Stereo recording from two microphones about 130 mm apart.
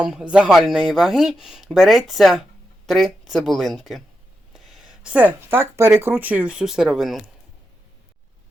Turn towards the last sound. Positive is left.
turn(degrees=0)  # may be behind; listen again after turning